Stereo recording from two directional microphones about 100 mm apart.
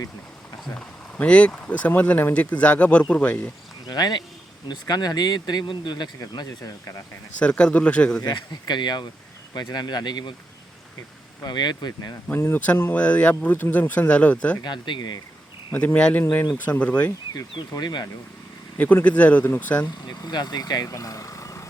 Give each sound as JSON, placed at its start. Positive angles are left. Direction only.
{"t": 0.8, "sound": "speech", "side_deg": 10}
{"t": 3.8, "sound": "speech", "side_deg": 45}
{"t": 7.3, "sound": "speech", "side_deg": 10}
{"t": 8.2, "sound": "speech", "side_deg": 45}
{"t": 11.4, "sound": "speech", "side_deg": 45}
{"t": 12.3, "sound": "speech", "side_deg": 20}
{"t": 14.6, "sound": "speech", "side_deg": 50}
{"t": 15.7, "sound": "speech", "side_deg": 15}
{"t": 17.3, "sound": "speech", "side_deg": 40}
{"t": 18.8, "sound": "speech", "side_deg": 15}
{"t": 20.1, "sound": "speech", "side_deg": 45}